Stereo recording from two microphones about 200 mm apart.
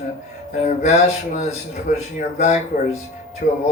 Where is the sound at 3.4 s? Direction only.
40° left (ahead or behind).